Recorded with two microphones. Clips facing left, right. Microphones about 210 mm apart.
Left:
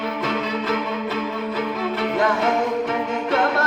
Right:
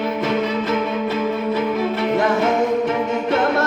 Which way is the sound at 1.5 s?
25° right (ahead or behind).